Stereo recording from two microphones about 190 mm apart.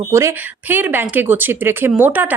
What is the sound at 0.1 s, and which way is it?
Speech, 15° right (ahead or behind).